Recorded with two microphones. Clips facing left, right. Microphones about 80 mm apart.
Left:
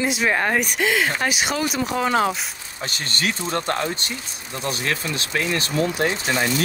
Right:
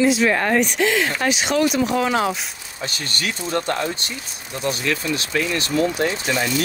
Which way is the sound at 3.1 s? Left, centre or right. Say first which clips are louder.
Left 2 dB; left.